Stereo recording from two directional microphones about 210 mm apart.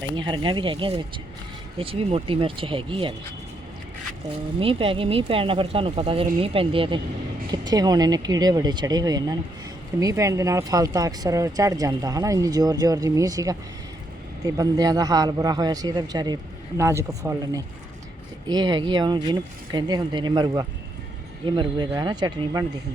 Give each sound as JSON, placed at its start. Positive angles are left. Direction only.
{"t": 0.2, "sound": "speech", "side_deg": -20}
{"t": 4.6, "sound": "speech", "side_deg": -25}